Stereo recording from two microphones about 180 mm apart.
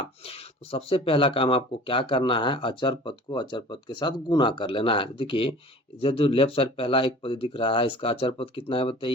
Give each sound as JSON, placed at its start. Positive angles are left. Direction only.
{"t": 0.0, "sound": "speech", "side_deg": 30}